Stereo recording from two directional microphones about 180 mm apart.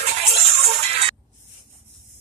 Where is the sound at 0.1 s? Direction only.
35° right (ahead or behind).